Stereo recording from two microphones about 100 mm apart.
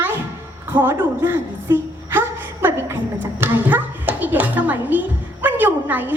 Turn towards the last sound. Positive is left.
turn(degrees=-20)  # may be behind; listen again after turning